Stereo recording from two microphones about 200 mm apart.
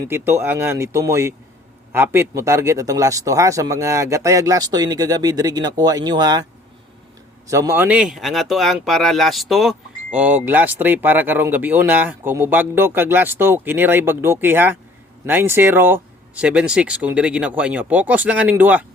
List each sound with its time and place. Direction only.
0.0 s speech: 10° right (ahead or behind)